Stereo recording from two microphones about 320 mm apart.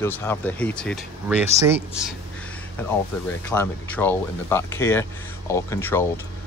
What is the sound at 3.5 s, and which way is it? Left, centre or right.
Speech, centre.